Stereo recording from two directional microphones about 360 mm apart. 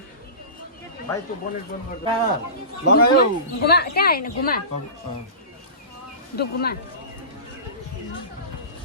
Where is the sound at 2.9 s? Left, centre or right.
Left.